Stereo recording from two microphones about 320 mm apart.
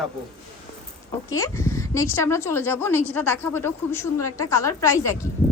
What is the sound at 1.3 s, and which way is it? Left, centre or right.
A woman's voice, centre.